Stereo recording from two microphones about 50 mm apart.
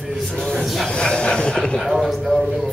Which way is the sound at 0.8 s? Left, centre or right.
Centre.